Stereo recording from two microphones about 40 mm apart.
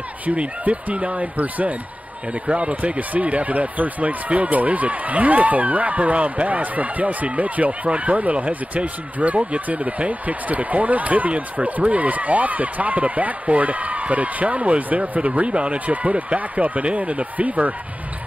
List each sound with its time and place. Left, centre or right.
0.4 s speech: right
2.4 s speech: right